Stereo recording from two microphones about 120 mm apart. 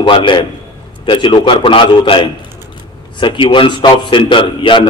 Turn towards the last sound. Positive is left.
turn(degrees=45)  # may be behind; listen again after turning